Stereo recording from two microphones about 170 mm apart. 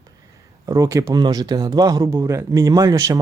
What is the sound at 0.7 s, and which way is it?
Speech, 20° right (ahead or behind).